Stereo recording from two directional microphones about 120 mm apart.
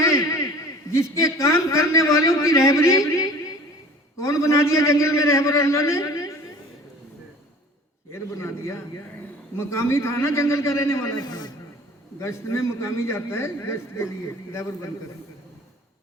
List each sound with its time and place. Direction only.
0.0 s a sound: 25° left (ahead or behind)
4.2 s a man's voice: 25° left (ahead or behind)
8.1 s a man's voice: 25° left (ahead or behind)
11.2 s a man's voice: 35° left (ahead or behind)
12.2 s a man's voice: 25° left (ahead or behind)